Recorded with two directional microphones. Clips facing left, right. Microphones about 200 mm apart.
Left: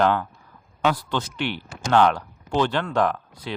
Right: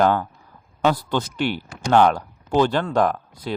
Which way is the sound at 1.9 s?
15° right (ahead or behind).